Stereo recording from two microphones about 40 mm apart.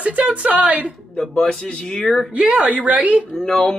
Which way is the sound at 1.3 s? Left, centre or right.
Left.